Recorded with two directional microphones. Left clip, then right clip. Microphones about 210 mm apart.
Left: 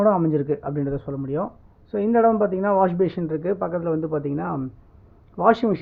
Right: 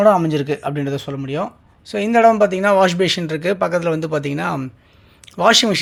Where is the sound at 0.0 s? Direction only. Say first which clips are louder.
Right 6 dB; 15° right (ahead or behind).